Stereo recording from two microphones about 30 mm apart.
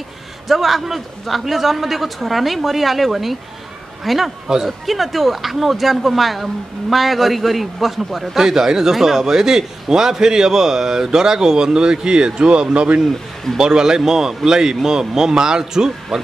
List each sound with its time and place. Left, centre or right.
0.5 s a man's voice: centre
8.4 s a man's voice: centre
12.6 s a man's voice: right
13.6 s a man's voice: right